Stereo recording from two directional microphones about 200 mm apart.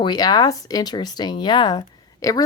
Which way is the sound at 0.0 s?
20° left (ahead or behind).